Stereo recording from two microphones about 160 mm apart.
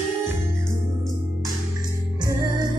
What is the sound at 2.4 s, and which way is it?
Music, 25° right (ahead or behind).